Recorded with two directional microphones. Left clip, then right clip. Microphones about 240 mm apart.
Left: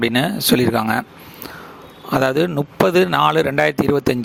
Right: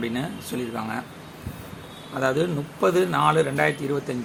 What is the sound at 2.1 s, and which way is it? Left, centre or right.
Speech, left.